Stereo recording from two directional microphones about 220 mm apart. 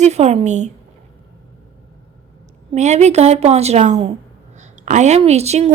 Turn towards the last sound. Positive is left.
turn(degrees=-30)  # may be behind; listen again after turning